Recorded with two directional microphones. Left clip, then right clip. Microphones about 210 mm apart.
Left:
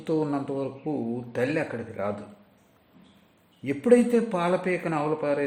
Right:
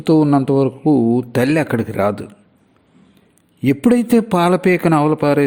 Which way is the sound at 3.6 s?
45° right (ahead or behind).